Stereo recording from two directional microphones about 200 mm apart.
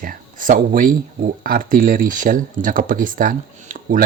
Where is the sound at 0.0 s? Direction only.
45° right (ahead or behind).